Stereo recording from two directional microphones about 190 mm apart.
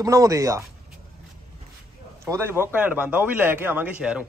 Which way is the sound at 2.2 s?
15° right (ahead or behind).